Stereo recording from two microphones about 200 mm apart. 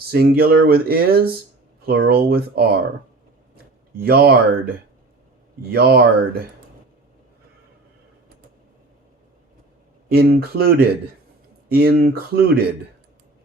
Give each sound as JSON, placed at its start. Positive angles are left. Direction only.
{"t": 0.1, "sound": "speech", "side_deg": -50}
{"t": 5.7, "sound": "speech", "side_deg": -50}
{"t": 10.1, "sound": "speech", "side_deg": -50}